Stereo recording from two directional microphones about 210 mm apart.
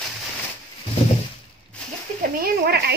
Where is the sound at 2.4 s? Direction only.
50° right (ahead or behind).